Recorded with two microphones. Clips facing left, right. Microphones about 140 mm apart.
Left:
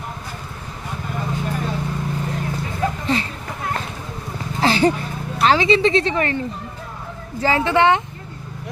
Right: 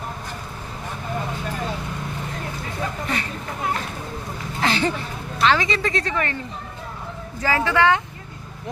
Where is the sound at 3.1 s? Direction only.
30° left (ahead or behind).